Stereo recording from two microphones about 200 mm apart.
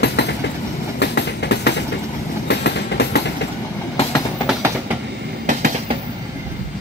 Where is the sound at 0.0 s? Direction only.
60° left (ahead or behind).